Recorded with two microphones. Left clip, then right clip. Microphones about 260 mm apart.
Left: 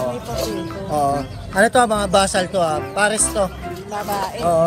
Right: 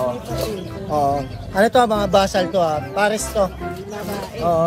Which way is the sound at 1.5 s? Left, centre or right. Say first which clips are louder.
Even; right.